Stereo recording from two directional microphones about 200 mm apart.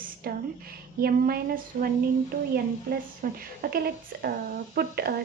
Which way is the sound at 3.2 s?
45° right (ahead or behind).